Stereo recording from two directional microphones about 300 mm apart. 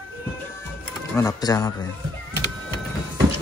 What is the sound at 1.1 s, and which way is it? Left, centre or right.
Speech, centre.